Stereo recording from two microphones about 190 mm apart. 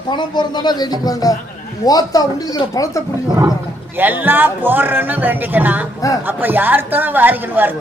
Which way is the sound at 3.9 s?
10° right (ahead or behind).